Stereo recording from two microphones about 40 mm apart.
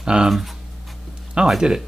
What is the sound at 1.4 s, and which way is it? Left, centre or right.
Speech, right.